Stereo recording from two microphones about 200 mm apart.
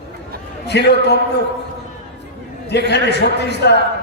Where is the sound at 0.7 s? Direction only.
55° left (ahead or behind).